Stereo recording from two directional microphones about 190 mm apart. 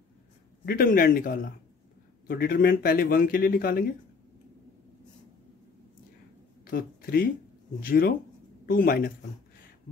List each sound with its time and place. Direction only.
0.7 s speech: 50° left (ahead or behind)
6.6 s speech: 50° left (ahead or behind)